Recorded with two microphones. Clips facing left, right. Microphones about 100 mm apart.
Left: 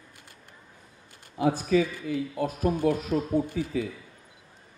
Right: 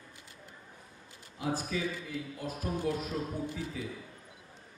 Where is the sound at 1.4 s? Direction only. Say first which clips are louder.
Left 10 dB; 75° left (ahead or behind); by 3.8 s 60° left (ahead or behind).